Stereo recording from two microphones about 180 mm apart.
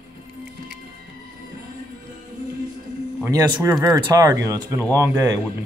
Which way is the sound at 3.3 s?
15° right (ahead or behind).